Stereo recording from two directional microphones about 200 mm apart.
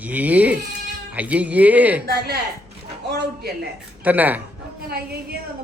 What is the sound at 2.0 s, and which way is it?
A man's voice, 50° right (ahead or behind).